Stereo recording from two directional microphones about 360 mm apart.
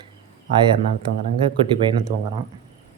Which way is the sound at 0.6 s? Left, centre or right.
Centre.